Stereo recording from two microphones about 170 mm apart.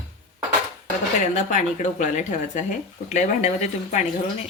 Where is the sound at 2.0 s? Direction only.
45° left (ahead or behind).